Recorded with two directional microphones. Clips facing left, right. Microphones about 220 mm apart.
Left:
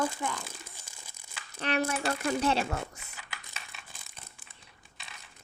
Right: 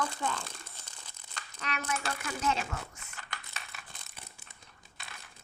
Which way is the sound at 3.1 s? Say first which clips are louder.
Right 2 dB; 5° left (ahead or behind).